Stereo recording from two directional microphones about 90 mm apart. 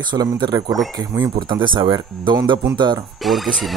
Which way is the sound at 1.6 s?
65° right (ahead or behind).